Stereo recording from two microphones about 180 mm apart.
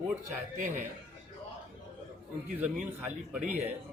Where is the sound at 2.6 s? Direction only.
10° right (ahead or behind).